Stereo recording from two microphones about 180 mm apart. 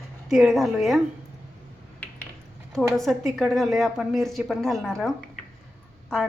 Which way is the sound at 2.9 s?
Centre (ahead or behind).